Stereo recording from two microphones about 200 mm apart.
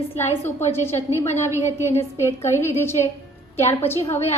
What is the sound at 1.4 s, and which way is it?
Speech, 10° right (ahead or behind).